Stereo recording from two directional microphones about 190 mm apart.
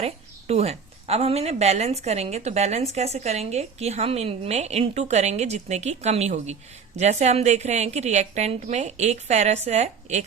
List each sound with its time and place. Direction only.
0.0 s a woman's voice: 35° right (ahead or behind)